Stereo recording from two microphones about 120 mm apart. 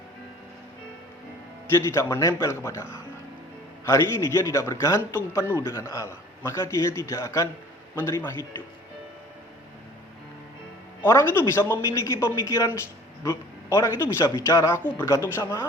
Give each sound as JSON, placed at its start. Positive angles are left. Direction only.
{"t": 1.7, "sound": "a man's voice", "side_deg": 20}
{"t": 3.8, "sound": "a man's voice", "side_deg": 25}
{"t": 11.0, "sound": "a man's voice", "side_deg": 20}